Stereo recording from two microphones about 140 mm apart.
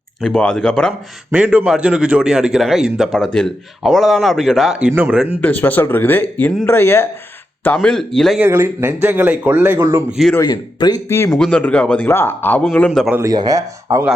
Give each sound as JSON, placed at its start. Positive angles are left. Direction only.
{"t": 0.2, "sound": "a man's voice", "side_deg": 5}
{"t": 1.3, "sound": "a man's voice", "side_deg": -10}
{"t": 5.4, "sound": "a man's voice", "side_deg": 10}
{"t": 8.4, "sound": "speech", "side_deg": -15}
{"t": 10.4, "sound": "speech", "side_deg": 30}
{"t": 11.3, "sound": "speech", "side_deg": 5}
{"t": 13.1, "sound": "speech", "side_deg": -25}